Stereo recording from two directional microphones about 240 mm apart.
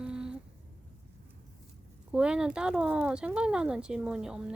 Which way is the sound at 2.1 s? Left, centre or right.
Centre.